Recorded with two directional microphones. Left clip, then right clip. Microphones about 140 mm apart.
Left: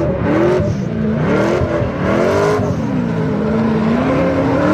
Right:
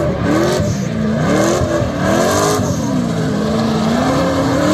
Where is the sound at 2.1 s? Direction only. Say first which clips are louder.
Even; 5° left (ahead or behind).